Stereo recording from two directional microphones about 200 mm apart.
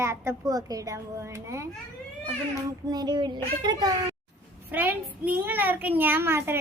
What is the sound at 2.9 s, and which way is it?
Child singing, 20° right (ahead or behind).